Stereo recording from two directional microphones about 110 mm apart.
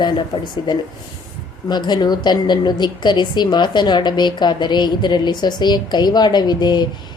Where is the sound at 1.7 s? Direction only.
40° left (ahead or behind).